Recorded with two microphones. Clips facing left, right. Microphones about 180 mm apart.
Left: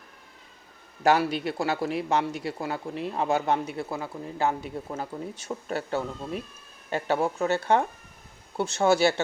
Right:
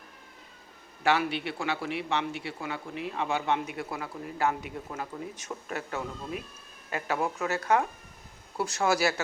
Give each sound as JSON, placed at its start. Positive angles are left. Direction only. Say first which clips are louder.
{"t": 1.0, "sound": "a man's voice", "louder": "left 4 dB", "side_deg": 40}